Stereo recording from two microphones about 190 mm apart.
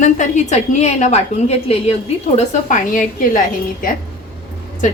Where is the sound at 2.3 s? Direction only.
45° left (ahead or behind).